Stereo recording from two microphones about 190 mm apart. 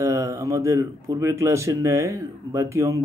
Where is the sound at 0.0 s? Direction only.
15° right (ahead or behind).